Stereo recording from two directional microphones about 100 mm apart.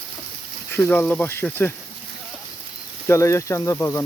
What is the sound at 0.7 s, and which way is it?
Speech, 20° left (ahead or behind).